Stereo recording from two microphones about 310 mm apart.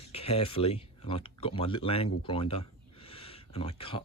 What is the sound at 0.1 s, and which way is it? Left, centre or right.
Speech, centre.